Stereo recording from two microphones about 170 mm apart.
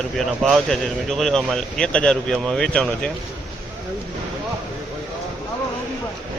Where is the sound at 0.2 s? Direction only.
Centre (ahead or behind).